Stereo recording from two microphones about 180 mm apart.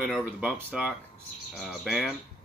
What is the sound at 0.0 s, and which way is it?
Speech, 10° right (ahead or behind).